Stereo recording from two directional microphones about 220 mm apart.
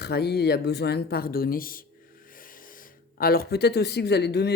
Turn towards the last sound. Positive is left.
turn(degrees=50)  # may be behind; listen again after turning